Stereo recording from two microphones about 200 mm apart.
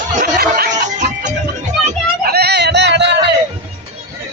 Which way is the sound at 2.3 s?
55° right (ahead or behind).